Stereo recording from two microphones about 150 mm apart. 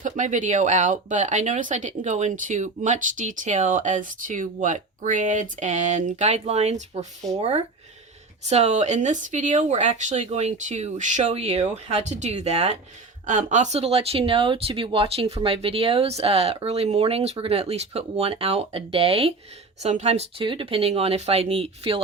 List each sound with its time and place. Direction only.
0.0 s speech: 55° right (ahead or behind); by 22.0 s 40° right (ahead or behind)